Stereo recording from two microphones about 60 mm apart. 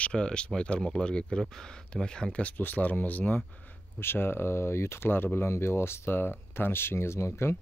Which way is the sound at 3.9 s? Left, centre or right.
Left.